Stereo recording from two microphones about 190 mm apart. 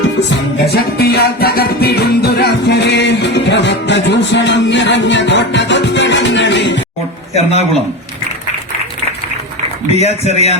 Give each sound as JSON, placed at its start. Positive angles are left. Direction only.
{"t": 0.2, "sound": "music", "side_deg": 65}
{"t": 7.3, "sound": "speech", "side_deg": 35}
{"t": 9.9, "sound": "speech", "side_deg": 35}